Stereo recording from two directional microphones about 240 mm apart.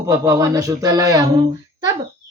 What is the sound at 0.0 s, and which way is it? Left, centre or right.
Music, centre.